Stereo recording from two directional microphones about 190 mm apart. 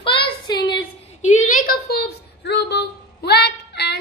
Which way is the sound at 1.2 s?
40° left (ahead or behind).